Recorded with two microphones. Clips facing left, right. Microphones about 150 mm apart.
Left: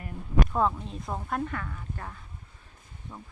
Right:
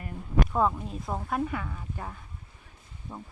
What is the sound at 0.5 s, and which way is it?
Speech, 5° right (ahead or behind).